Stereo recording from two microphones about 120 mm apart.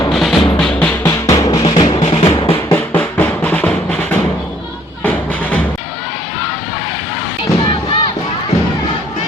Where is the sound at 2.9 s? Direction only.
10° left (ahead or behind).